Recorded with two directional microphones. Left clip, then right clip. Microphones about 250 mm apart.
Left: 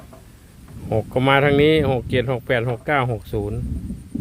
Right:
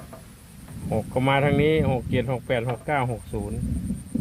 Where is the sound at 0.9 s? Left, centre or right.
Left.